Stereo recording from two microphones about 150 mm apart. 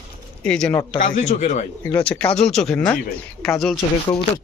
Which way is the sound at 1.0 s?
50° left (ahead or behind).